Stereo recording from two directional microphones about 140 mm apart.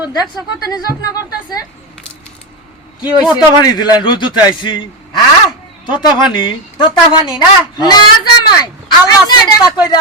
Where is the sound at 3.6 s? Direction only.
30° left (ahead or behind).